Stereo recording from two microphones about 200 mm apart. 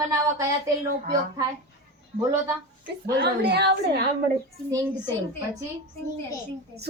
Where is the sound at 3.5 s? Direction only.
55° right (ahead or behind).